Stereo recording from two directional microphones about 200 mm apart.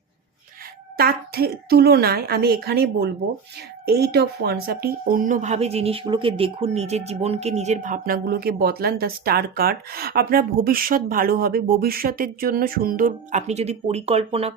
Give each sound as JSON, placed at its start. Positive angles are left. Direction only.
{"t": 0.9, "sound": "speech", "side_deg": -50}